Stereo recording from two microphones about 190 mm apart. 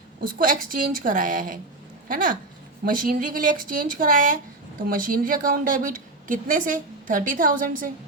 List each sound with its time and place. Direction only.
0.2 s a woman's voice: 45° right (ahead or behind)